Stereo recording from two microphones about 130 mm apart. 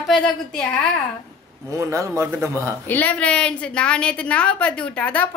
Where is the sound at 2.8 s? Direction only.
15° left (ahead or behind).